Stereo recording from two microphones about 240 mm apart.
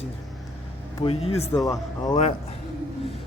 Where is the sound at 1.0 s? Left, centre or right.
Left.